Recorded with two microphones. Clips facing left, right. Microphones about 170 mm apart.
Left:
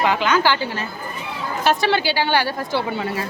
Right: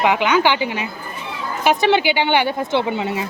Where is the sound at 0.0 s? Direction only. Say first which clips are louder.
Right 2 dB; 15° right (ahead or behind).